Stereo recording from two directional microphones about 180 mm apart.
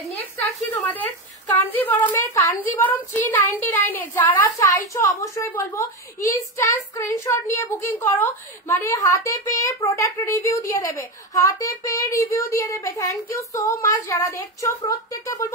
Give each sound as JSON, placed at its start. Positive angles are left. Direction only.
{"t": 0.7, "sound": "a woman's voice", "side_deg": 10}